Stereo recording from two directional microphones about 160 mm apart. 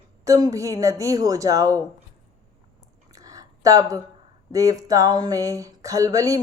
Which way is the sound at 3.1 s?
20° right (ahead or behind).